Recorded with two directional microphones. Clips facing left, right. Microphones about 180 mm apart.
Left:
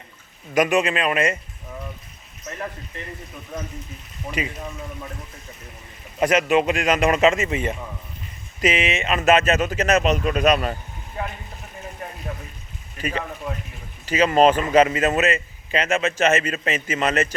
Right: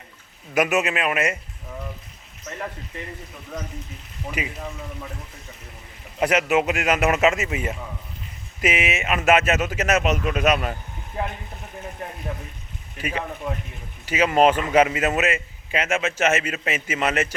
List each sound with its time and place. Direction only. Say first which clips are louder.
0.5 s a man's voice: left 2 dB; 5° right (ahead or behind)
4.3 s a man's voice: left 2 dB; 10° right (ahead or behind)
6.1 s a man's voice: left 2 dB; 10° right (ahead or behind)
13.0 s a man's voice: left 1 dB; 10° right (ahead or behind)